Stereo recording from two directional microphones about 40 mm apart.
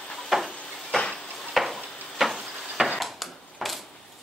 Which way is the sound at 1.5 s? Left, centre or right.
Centre.